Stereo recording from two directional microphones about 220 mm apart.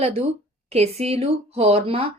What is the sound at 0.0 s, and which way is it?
Speech, 30° right (ahead or behind).